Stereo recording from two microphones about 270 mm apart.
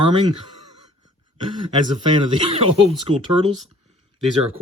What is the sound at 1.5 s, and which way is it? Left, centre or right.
Speech, centre.